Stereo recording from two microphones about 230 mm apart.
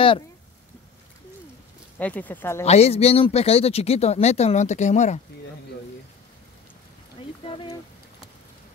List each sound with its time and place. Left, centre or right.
2.0 s speech: centre
2.6 s speech: left
7.4 s a sound: left